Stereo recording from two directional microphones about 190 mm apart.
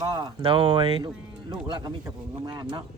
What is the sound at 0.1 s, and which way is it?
Speech, 25° right (ahead or behind).